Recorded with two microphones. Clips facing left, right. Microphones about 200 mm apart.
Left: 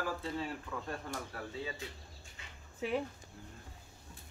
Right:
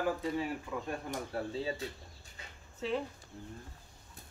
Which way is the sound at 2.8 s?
10° left (ahead or behind).